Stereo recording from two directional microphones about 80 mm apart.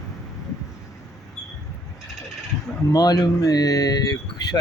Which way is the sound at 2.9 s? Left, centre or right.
Left.